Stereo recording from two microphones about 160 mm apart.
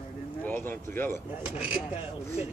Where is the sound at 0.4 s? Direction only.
10° left (ahead or behind).